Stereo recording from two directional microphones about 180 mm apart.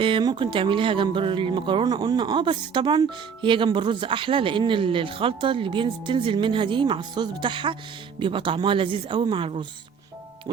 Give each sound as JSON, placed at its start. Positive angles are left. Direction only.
{"t": 0.0, "sound": "speech", "side_deg": -25}